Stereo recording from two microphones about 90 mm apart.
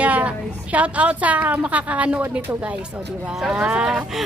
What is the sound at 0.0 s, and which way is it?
Speech, 15° right (ahead or behind).